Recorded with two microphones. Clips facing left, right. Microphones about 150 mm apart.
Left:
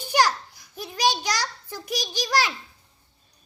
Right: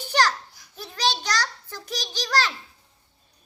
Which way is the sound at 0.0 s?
10° left (ahead or behind).